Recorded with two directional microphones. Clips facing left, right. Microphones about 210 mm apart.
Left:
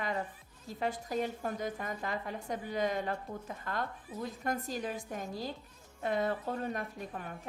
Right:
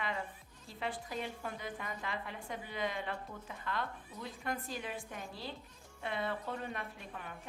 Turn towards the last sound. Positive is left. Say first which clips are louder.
# left 5 dB
turn(degrees=40)  # may be behind; listen again after turning